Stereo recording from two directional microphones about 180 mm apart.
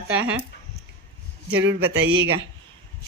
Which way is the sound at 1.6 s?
80° right.